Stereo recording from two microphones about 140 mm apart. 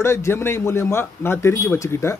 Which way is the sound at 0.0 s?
20° left (ahead or behind).